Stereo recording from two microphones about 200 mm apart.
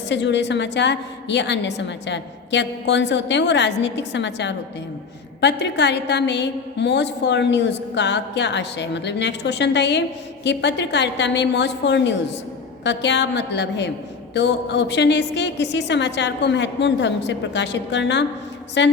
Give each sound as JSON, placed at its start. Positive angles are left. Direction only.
{"t": 0.1, "sound": "a woman's voice", "side_deg": 60}